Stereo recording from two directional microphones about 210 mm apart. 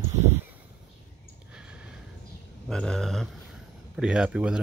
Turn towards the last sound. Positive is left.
turn(degrees=-5)  # may be behind; listen again after turning